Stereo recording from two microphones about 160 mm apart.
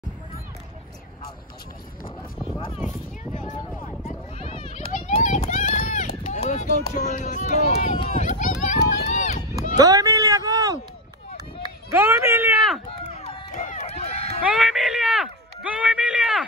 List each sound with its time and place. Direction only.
4.4 s children playing: 35° left (ahead or behind)
4.9 s run: 50° left (ahead or behind)
9.8 s a sound: 20° right (ahead or behind)
11.9 s speech: 10° right (ahead or behind)
13.1 s run: 35° left (ahead or behind)
14.4 s speech: 5° right (ahead or behind)